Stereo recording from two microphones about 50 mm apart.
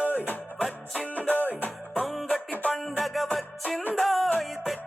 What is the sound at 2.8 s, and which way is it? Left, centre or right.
Music, centre.